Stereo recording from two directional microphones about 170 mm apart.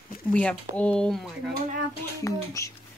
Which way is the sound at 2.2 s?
20° left (ahead or behind).